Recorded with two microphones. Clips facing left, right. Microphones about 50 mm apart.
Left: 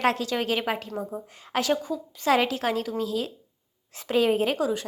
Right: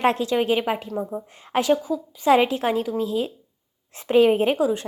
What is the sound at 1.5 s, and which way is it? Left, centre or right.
A woman's voice, right.